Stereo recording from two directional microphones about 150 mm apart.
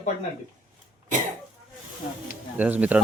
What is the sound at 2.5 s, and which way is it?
Speech, 10° right (ahead or behind).